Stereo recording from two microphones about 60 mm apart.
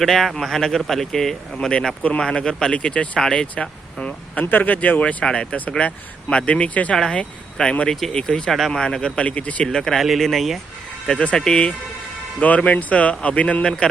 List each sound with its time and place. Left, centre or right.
0.0 s speech: centre
2.7 s speech: left
5.2 s speech: centre
8.5 s speech: centre
8.8 s speech: centre
9.7 s speech: centre
11.0 s speech: centre
12.4 s speech: left